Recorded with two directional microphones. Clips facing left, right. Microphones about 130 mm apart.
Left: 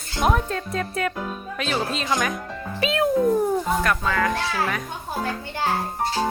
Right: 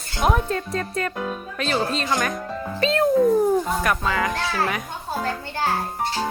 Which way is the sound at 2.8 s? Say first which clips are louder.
Right 2 dB; 5° left (ahead or behind).